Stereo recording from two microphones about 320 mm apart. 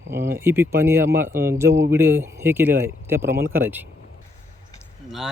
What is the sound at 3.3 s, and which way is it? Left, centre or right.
Speech, right.